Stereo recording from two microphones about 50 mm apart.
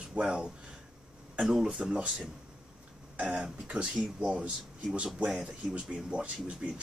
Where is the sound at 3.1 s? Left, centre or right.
Centre.